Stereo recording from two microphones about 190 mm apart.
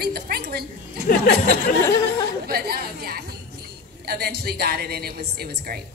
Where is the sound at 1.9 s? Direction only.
15° left (ahead or behind).